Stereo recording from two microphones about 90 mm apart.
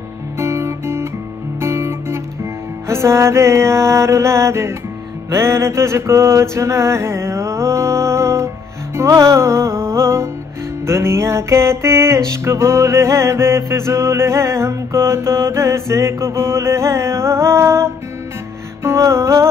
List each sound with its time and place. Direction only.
0.4 s guitar: 30° right (ahead or behind)
2.9 s music: 30° right (ahead or behind)
5.3 s mantra: 30° right (ahead or behind)
8.9 s music: 35° right (ahead or behind)